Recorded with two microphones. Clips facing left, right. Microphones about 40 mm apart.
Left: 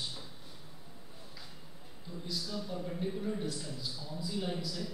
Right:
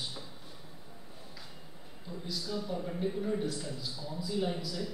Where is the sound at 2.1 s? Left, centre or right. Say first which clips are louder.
Right 2 dB; centre.